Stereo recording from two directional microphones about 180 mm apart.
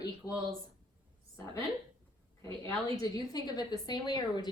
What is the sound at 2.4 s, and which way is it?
A woman's voice, 15° left (ahead or behind).